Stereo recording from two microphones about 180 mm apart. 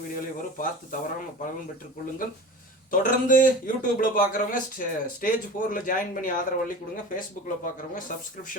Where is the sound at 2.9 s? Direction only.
50° left (ahead or behind).